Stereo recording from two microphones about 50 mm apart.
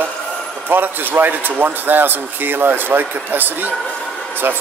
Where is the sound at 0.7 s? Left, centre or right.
Right.